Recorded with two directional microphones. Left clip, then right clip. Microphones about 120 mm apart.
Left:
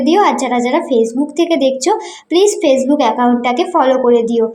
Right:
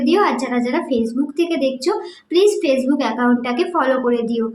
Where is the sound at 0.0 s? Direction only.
25° left (ahead or behind).